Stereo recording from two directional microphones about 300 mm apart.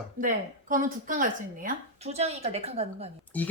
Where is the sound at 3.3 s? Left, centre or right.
Centre.